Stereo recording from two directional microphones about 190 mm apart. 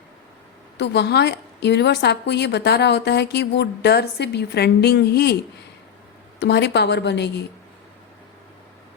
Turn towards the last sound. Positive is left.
turn(degrees=65)  # may be behind; listen again after turning